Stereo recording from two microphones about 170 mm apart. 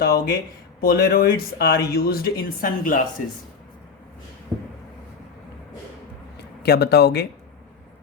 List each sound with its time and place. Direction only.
0.0 s speech: 65° left (ahead or behind)
6.6 s speech: 70° left (ahead or behind)